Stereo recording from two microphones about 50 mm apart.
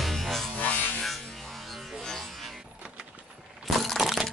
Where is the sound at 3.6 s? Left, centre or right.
Centre.